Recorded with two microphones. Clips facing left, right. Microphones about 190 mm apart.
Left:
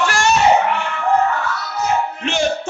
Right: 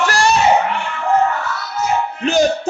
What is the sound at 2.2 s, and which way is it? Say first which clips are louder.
Music: right 8 dB; 40° right (ahead or behind).